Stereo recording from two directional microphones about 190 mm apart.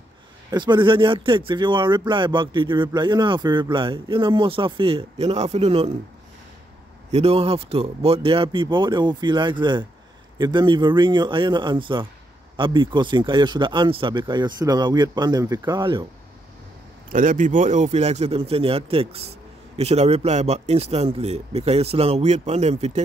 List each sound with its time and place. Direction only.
0.5 s speech: 25° right (ahead or behind)
7.1 s speech: 30° right (ahead or behind)
17.1 s a man's voice: 45° right (ahead or behind)